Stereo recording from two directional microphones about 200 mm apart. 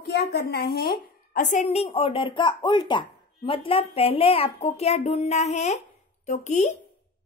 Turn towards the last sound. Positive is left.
turn(degrees=35)  # may be behind; listen again after turning